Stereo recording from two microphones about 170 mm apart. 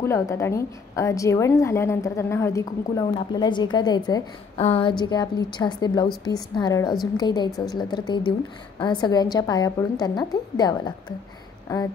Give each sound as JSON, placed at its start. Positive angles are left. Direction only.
{"t": 0.0, "sound": "a woman's voice", "side_deg": 15}